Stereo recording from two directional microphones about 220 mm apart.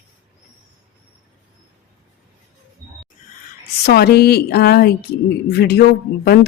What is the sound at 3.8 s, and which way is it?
Speech, 45° left (ahead or behind).